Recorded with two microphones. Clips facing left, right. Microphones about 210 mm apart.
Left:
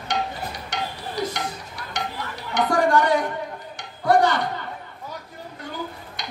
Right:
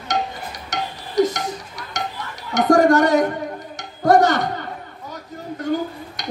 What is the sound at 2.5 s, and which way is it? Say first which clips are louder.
Music: right 6 dB; 45° right (ahead or behind).